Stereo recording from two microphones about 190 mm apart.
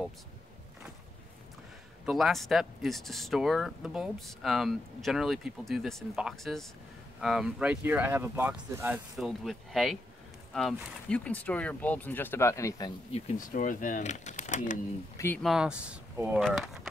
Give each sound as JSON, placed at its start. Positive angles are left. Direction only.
{"t": 2.0, "sound": "speech", "side_deg": 0}
{"t": 13.1, "sound": "speech", "side_deg": 40}
{"t": 15.1, "sound": "speech", "side_deg": 10}